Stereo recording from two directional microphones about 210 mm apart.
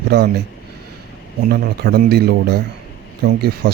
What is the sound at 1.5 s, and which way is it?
Speech, 50° right (ahead or behind).